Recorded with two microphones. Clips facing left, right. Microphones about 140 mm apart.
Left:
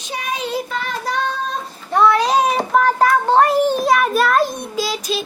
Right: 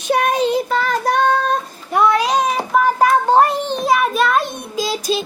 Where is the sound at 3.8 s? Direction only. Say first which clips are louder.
Even; centre (ahead or behind).